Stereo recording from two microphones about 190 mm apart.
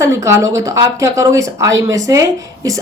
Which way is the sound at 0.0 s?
15° right (ahead or behind).